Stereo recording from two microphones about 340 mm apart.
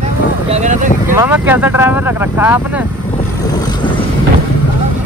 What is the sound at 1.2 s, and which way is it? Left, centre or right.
Speech, centre.